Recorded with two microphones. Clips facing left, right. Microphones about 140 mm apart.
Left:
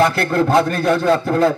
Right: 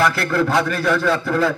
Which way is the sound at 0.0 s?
35° left (ahead or behind).